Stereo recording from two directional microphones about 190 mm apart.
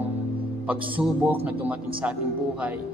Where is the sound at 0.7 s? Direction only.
10° right (ahead or behind).